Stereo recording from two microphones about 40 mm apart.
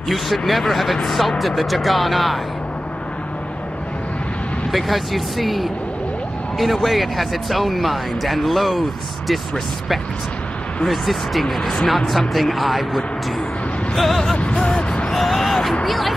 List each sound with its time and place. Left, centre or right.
0.5 s speech: centre
4.6 s speech: centre
10.9 s speech: centre
14.4 s speech: left
15.0 s a sound: centre
15.8 s speech: centre